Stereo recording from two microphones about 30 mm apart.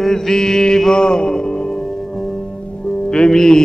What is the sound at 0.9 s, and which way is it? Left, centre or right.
Music, left.